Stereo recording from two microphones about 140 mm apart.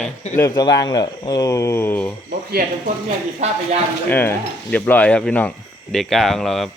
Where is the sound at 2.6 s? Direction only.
90° right.